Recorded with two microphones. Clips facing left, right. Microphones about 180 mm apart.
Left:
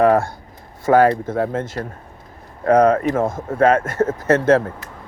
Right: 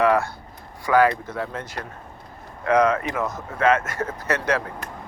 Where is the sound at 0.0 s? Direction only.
45° left (ahead or behind).